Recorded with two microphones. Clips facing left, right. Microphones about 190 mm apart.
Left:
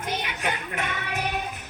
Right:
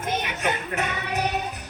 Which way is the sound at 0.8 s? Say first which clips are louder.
Right 3 dB; 40° right (ahead or behind).